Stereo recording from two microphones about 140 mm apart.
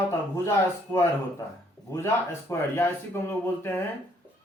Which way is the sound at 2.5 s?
15° left (ahead or behind).